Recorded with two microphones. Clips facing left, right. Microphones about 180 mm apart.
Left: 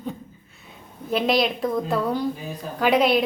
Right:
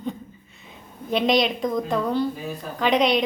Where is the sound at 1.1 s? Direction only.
5° left (ahead or behind).